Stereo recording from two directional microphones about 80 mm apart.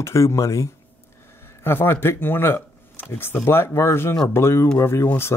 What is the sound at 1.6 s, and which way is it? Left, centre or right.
Speech, left.